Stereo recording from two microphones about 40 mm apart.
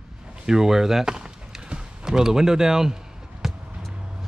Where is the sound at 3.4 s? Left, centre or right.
Centre.